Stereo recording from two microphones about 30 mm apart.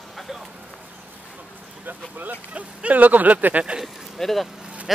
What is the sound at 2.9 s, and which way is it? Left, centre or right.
Speech, right.